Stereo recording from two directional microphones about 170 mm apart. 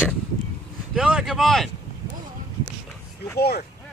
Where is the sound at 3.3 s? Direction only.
70° left (ahead or behind).